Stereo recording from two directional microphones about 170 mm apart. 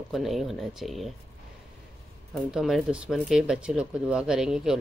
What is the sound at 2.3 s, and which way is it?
Speech, centre (ahead or behind).